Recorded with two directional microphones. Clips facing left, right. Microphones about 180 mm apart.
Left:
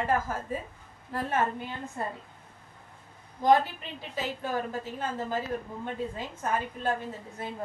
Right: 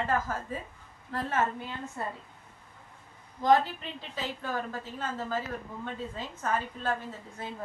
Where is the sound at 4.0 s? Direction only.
10° left (ahead or behind).